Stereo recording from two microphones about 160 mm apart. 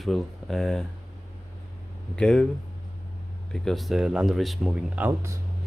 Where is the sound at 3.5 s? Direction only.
Centre (ahead or behind).